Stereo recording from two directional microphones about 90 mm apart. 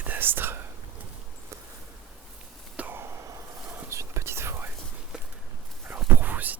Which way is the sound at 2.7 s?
20° right (ahead or behind).